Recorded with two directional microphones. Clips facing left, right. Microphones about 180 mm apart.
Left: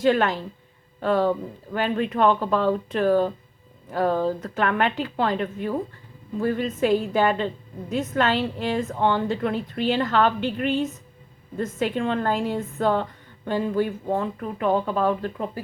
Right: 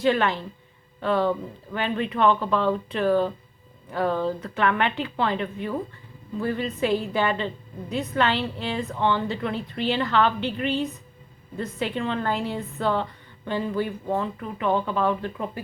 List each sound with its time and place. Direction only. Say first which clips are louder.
0.0 s a woman's voice: left 2 dB; 45° left (ahead or behind)